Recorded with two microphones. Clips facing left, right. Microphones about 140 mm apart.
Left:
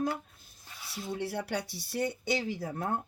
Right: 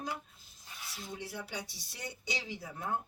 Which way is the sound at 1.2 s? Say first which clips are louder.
Left 9 dB; 65° left (ahead or behind).